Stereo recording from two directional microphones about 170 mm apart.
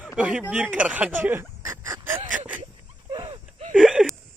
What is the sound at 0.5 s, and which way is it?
Speech, 5° right (ahead or behind).